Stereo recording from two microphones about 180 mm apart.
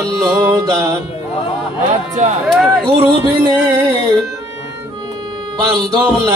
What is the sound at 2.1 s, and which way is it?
Speech, 40° right (ahead or behind).